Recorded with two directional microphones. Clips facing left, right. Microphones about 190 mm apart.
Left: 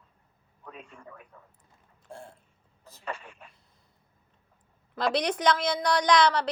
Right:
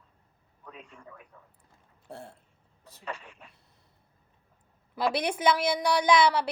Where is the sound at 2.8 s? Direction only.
65° right (ahead or behind).